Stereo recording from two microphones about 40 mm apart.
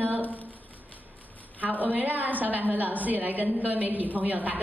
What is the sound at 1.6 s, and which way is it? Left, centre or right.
A woman's voice, right.